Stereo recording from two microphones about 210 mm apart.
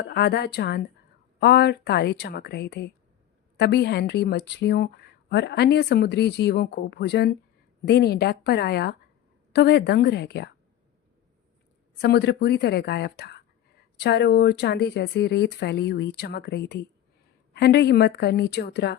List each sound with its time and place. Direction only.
0.0 s a woman's voice: 50° left (ahead or behind)
11.9 s a woman's voice: 55° left (ahead or behind)